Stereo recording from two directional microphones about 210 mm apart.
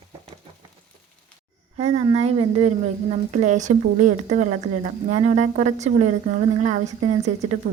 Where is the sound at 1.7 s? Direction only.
30° right (ahead or behind).